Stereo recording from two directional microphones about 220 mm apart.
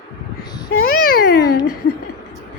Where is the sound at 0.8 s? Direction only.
45° left (ahead or behind).